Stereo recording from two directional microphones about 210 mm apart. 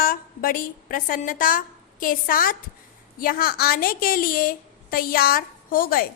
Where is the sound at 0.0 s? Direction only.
40° left (ahead or behind).